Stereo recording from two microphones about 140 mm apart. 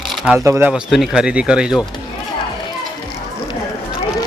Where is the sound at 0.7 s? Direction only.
Centre (ahead or behind).